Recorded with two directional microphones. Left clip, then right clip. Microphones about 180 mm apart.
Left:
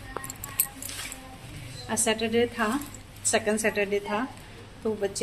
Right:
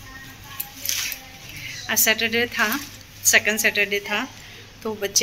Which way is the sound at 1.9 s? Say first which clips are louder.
Right 6 dB; 5° left (ahead or behind).